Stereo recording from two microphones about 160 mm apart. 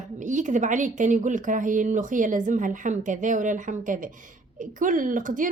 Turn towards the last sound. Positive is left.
turn(degrees=-55)  # may be behind; listen again after turning